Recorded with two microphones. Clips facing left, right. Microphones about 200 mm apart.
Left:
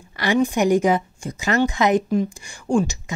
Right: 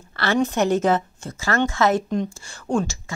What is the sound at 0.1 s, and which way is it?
Speech, 15° left (ahead or behind).